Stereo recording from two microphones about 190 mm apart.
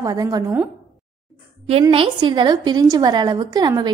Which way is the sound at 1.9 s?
25° right (ahead or behind).